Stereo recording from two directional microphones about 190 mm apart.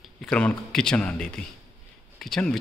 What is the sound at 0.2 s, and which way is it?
Speech, 5° left (ahead or behind).